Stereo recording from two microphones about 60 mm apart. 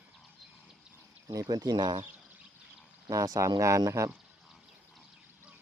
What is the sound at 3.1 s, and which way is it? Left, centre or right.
Speech, right.